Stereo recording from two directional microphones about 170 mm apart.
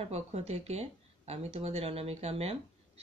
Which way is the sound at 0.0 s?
40° right (ahead or behind).